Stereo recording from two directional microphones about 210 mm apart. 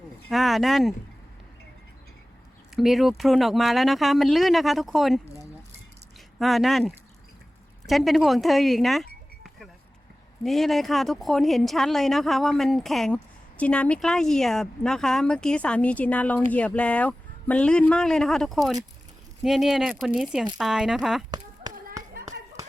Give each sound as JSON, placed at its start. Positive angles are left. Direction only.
{"t": 0.3, "sound": "speech", "side_deg": 0}
{"t": 2.7, "sound": "speech", "side_deg": 0}
{"t": 6.4, "sound": "speech", "side_deg": 0}
{"t": 10.4, "sound": "speech", "side_deg": 0}
{"t": 21.2, "sound": "a sound", "side_deg": -20}